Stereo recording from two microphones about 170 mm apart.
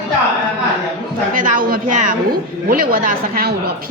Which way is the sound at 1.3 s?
50° right (ahead or behind).